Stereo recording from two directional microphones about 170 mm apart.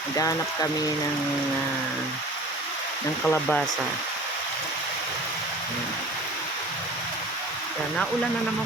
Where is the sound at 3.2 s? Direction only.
5° left (ahead or behind).